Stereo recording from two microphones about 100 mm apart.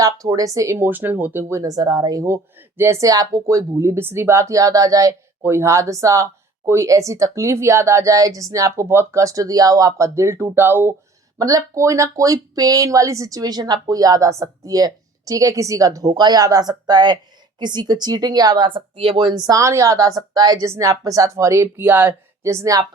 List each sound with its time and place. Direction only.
0.0 s speech: 40° right (ahead or behind)
0.9 s speech: 20° right (ahead or behind)
11.3 s a woman's voice: 35° right (ahead or behind)
18.7 s speech: 60° right (ahead or behind); by 20.7 s 40° right (ahead or behind)
20.7 s speech: 30° right (ahead or behind)